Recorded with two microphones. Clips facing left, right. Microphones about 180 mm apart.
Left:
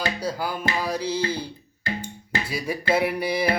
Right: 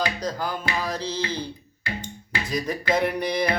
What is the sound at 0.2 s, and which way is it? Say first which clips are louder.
Music: left 1 dB; 10° left (ahead or behind).